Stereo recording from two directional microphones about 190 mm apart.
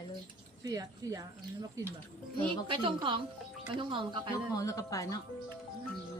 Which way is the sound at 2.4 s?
25° right (ahead or behind).